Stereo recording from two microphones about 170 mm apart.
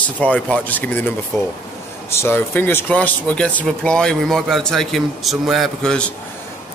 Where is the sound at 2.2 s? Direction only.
15° left (ahead or behind).